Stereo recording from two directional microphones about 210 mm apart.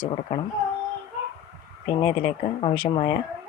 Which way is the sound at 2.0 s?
25° left (ahead or behind).